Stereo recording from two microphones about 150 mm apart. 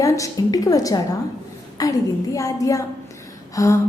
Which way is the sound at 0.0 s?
20° left (ahead or behind).